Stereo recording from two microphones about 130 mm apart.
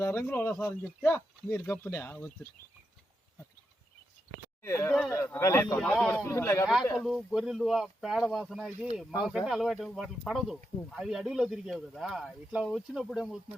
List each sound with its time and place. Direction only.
0.0 s speech: 20° left (ahead or behind)
4.6 s speech: 20° left (ahead or behind)
5.8 s speech: 5° left (ahead or behind)
6.2 s speech: 20° left (ahead or behind)
7.0 s speech: 5° left (ahead or behind)